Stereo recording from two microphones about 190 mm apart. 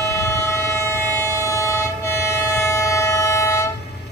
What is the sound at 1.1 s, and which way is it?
Train, 15° left (ahead or behind).